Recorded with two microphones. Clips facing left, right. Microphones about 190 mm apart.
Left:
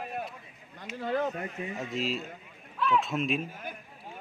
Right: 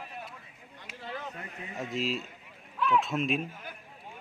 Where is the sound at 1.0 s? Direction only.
50° left (ahead or behind).